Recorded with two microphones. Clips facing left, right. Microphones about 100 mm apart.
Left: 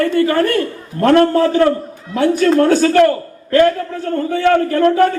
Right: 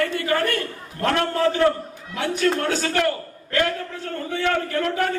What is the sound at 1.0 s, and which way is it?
A man's voice, 40° left (ahead or behind).